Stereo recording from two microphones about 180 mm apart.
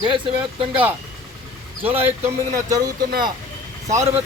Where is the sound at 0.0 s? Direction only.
30° right (ahead or behind).